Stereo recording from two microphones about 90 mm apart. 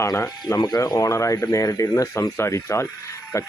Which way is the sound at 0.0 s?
35° left (ahead or behind).